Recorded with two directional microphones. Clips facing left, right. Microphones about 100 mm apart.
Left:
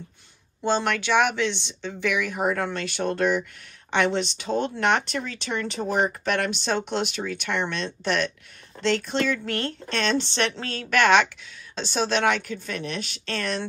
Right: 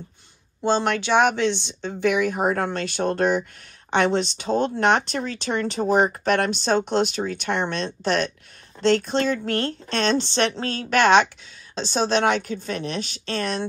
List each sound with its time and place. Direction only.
0.6 s speech: 25° right (ahead or behind)